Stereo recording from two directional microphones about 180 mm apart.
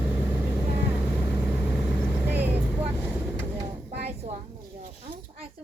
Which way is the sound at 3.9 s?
35° right (ahead or behind).